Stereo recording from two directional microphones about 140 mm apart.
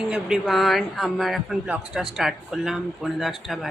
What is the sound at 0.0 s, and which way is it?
A man's voice, 5° right (ahead or behind).